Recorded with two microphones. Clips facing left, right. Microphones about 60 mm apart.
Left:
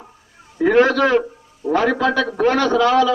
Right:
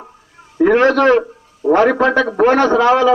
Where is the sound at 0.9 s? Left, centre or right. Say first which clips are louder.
Right 4 dB; right.